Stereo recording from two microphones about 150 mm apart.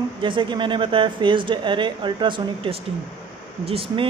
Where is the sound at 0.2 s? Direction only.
35° right (ahead or behind).